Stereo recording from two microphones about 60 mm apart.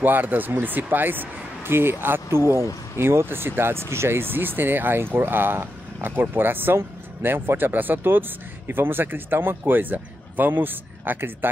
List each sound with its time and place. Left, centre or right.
0.0 s speech: right